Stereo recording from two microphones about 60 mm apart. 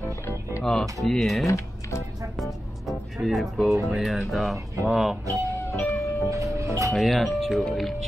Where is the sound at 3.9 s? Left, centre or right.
Centre.